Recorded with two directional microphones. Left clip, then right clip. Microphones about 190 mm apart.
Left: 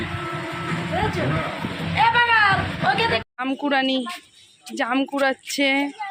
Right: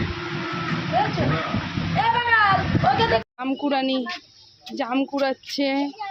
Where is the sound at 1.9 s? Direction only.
20° right (ahead or behind).